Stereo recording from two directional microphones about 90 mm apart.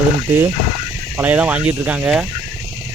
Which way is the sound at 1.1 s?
15° right (ahead or behind).